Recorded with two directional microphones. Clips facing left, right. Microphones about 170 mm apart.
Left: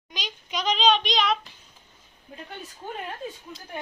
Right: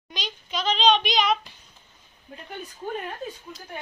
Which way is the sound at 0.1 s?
10° left (ahead or behind).